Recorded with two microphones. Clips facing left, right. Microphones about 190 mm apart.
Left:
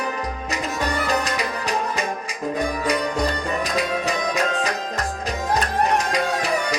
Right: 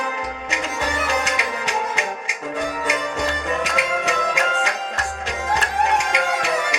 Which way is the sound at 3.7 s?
35° left (ahead or behind).